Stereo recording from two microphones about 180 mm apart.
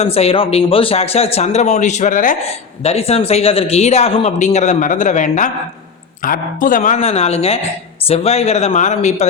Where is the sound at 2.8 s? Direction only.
35° left (ahead or behind).